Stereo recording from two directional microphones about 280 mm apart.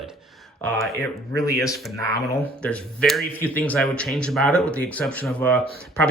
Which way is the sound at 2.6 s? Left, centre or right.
Centre.